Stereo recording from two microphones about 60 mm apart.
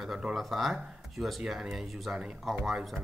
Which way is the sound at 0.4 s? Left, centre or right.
Centre.